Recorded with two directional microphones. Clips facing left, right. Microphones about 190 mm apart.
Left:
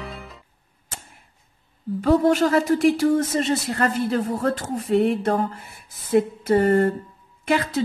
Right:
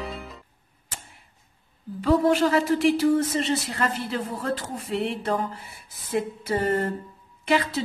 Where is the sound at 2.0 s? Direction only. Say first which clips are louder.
Left 2 dB; 45° left (ahead or behind).